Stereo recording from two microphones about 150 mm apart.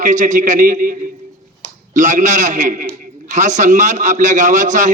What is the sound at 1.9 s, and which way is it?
A man's voice, 55° right (ahead or behind).